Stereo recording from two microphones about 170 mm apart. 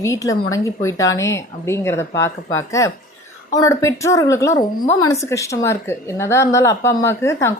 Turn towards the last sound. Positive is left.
turn(degrees=15)  # may be behind; listen again after turning